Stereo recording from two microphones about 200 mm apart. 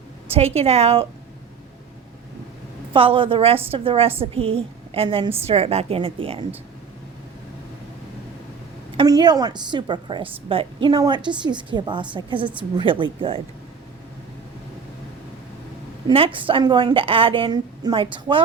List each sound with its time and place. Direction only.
0.3 s a woman's voice: 30° right (ahead or behind)
2.9 s a woman's voice: 25° right (ahead or behind)
9.0 s a woman's voice: 20° right (ahead or behind)
16.0 s a woman's voice: 25° right (ahead or behind)